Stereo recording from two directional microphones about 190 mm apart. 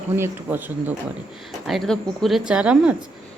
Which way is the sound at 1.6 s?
Centre (ahead or behind).